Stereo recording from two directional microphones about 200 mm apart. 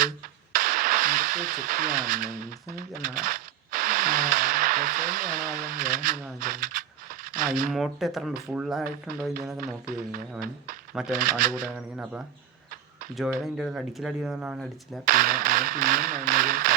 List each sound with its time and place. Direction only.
0.5 s speech: 45° right (ahead or behind)
6.4 s a sound: 45° right (ahead or behind)
7.7 s speech: centre (ahead or behind)
11.1 s speech: 45° right (ahead or behind)
13.4 s speech: 5° right (ahead or behind)
15.0 s speech: 45° right (ahead or behind)